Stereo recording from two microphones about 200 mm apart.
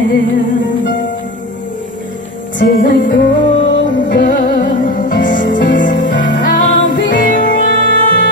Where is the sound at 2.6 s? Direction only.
40° left (ahead or behind).